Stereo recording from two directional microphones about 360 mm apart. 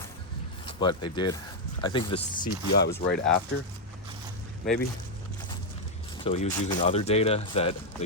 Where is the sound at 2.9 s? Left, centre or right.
Centre.